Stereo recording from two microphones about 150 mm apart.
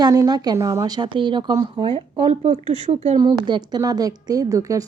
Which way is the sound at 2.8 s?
50° right (ahead or behind).